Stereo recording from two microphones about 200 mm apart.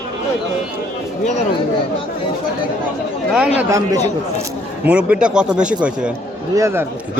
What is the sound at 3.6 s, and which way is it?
A man's voice, 15° right (ahead or behind).